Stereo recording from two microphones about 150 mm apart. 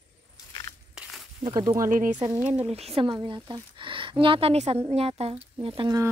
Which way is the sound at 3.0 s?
30° right (ahead or behind).